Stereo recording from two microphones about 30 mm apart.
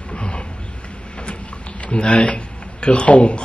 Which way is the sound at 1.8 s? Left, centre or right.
Left.